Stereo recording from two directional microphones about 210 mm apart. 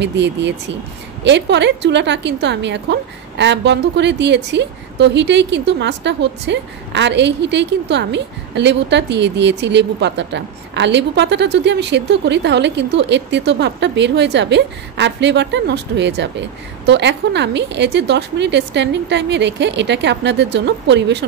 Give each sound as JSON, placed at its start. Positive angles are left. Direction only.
{"t": 0.0, "sound": "a woman's voice", "side_deg": -55}